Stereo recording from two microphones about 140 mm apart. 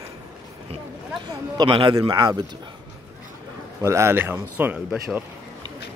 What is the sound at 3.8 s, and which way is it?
Speech, 20° right (ahead or behind).